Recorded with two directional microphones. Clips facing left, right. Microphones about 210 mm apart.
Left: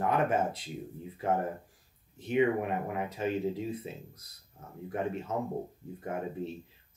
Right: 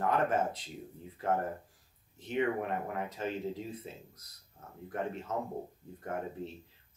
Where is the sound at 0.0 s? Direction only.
10° left (ahead or behind).